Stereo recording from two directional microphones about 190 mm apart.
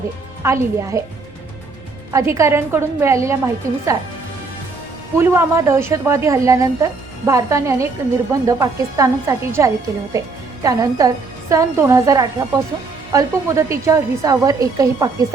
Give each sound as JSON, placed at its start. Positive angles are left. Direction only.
{"t": 0.4, "sound": "a woman's voice", "side_deg": -15}
{"t": 2.1, "sound": "a woman's voice", "side_deg": -15}
{"t": 5.1, "sound": "a woman's voice", "side_deg": -10}